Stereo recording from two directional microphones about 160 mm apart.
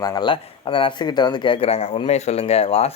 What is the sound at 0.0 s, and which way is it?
Speech, 25° left (ahead or behind).